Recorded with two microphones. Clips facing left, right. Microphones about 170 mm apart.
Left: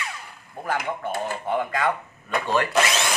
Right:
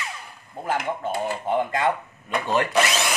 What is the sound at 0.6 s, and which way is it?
Speech, 20° right (ahead or behind).